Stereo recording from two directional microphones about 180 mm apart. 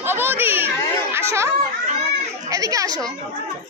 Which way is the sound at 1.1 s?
15° right (ahead or behind).